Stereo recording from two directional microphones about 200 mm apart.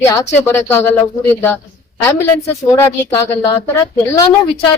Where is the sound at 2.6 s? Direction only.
10° left (ahead or behind).